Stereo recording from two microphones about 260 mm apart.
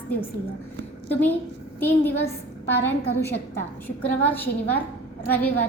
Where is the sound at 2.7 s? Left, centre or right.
Left.